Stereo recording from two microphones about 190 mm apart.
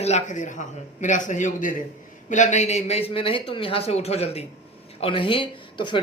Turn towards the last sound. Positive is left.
turn(degrees=25)  # may be behind; listen again after turning